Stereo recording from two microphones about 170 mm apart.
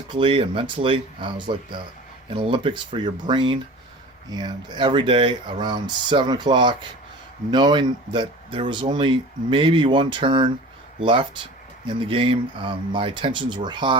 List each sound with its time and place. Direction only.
0.1 s speech: 30° right (ahead or behind)